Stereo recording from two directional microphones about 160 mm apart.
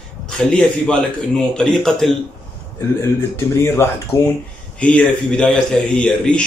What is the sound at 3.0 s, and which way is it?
Speech, 15° left (ahead or behind).